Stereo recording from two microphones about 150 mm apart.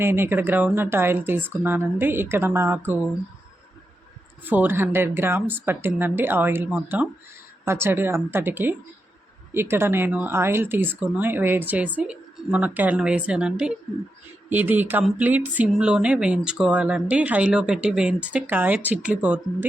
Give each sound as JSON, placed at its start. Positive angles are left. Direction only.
{"t": 0.0, "sound": "speech", "side_deg": -15}
{"t": 4.4, "sound": "speech", "side_deg": -10}